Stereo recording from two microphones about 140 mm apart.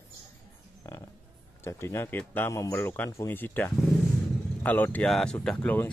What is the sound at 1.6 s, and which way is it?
Speech, 15° left (ahead or behind).